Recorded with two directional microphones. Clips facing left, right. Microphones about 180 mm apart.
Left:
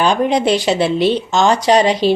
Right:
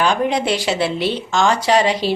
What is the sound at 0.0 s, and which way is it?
A woman's voice, 20° left (ahead or behind).